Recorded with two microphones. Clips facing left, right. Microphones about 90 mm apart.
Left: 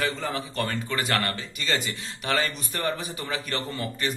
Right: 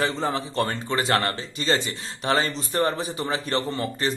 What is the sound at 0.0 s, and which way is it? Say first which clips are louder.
A man's voice: right 4 dB; 25° right (ahead or behind).